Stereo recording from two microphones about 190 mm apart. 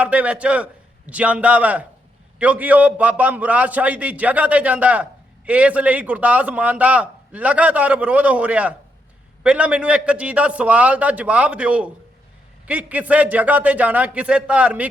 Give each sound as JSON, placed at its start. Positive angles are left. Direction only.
{"t": 0.0, "sound": "a man's voice", "side_deg": -5}